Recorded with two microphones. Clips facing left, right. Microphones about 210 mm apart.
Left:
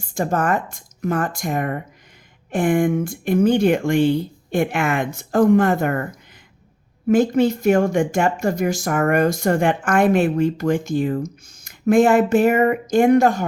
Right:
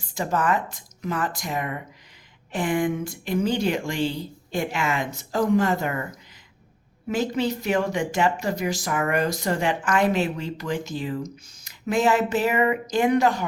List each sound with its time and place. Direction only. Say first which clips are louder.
0.0 s speech: left 4 dB; 50° left (ahead or behind)
7.1 s speech: left 8 dB; 50° left (ahead or behind)